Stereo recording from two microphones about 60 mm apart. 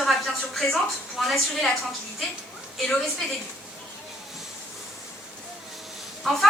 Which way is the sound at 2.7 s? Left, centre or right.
Centre.